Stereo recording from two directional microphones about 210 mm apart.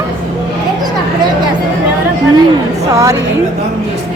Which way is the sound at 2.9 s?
15° right (ahead or behind).